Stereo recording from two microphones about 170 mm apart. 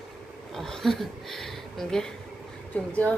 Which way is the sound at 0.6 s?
Centre (ahead or behind).